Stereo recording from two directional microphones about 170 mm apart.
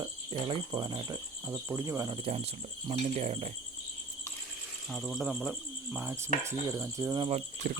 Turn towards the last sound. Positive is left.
turn(degrees=-55)  # may be behind; listen again after turning